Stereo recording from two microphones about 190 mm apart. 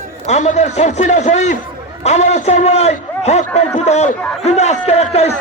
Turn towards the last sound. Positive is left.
turn(degrees=35)  # may be behind; listen again after turning